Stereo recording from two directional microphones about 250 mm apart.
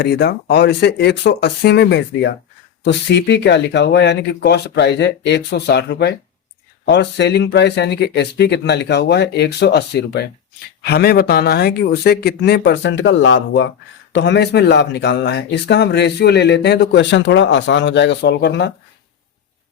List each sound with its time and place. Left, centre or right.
0.0 s speech: left